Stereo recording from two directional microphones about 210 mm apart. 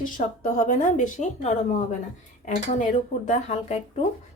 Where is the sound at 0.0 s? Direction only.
35° left (ahead or behind).